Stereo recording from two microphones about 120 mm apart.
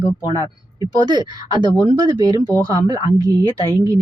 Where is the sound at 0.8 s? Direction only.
35° right (ahead or behind).